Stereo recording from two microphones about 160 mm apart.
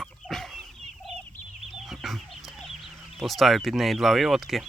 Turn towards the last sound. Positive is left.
turn(degrees=0)  # may be behind; listen again after turning